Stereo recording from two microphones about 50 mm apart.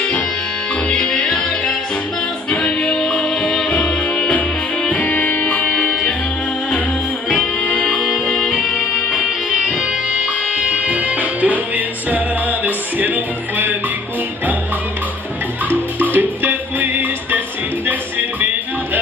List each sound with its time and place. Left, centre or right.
0.8 s music: centre
2.5 s music: left
5.9 s music: centre
10.7 s music: right
16.0 s music: right